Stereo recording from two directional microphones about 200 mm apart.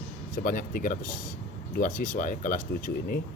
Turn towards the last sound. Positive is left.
turn(degrees=45)  # may be behind; listen again after turning